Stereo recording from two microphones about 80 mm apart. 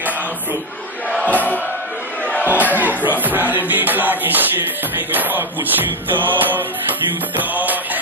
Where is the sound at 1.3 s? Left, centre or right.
Left.